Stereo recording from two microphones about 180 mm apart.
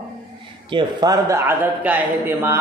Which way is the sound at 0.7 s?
20° right (ahead or behind).